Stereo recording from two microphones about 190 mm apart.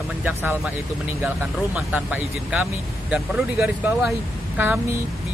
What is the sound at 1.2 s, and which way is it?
Speech, centre (ahead or behind).